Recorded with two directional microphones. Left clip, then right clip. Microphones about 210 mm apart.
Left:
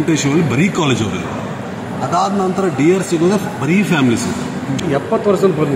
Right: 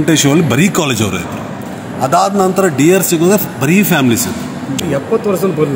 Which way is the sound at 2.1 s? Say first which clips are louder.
Right 5 dB; 55° right (ahead or behind).